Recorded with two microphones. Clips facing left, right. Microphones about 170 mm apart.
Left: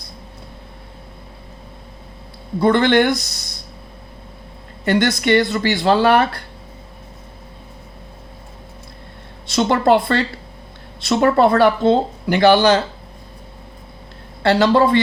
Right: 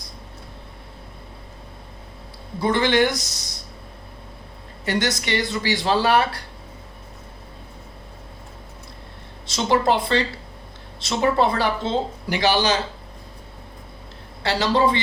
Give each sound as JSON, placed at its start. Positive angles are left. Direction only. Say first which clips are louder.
{"t": 2.6, "sound": "speech", "louder": "left 5 dB", "side_deg": 60}
{"t": 4.9, "sound": "speech", "louder": "left 8 dB", "side_deg": 55}
{"t": 9.5, "sound": "speech", "louder": "left 5 dB", "side_deg": 60}
{"t": 14.4, "sound": "speech", "louder": "left 6 dB", "side_deg": 55}